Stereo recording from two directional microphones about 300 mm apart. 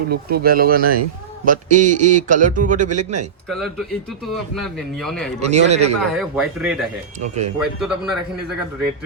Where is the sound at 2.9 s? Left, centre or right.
Right.